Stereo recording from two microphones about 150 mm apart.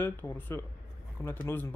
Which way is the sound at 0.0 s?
15° left (ahead or behind).